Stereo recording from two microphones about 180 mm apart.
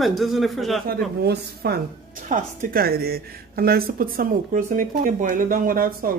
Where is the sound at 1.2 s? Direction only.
60° right (ahead or behind).